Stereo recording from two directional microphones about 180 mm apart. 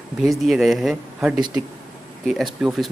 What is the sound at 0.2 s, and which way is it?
Speech, centre (ahead or behind).